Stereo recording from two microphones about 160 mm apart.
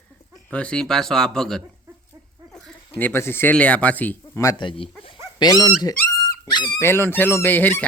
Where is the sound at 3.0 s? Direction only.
15° left (ahead or behind).